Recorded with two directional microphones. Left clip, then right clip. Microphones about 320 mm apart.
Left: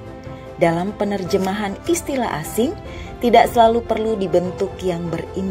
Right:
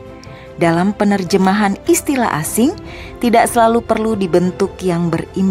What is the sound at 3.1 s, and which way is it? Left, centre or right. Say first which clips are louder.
Speech: right 1 dB; centre.